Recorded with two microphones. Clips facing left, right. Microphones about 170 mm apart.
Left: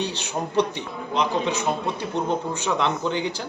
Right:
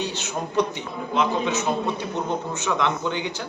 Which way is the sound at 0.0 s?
35° left (ahead or behind).